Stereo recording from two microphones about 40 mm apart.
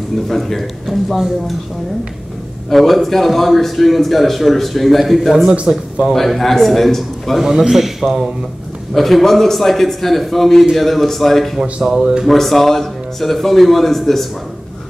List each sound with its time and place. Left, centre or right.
0.3 s a man's voice: centre
2.7 s a man's voice: centre
7.4 s a man's voice: centre
8.9 s a man's voice: centre
12.0 s speech: centre
12.3 s a man's voice: centre